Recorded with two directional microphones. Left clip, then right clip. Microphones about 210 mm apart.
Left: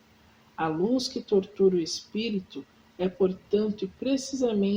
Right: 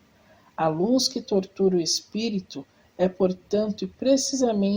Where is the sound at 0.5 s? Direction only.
35° right (ahead or behind).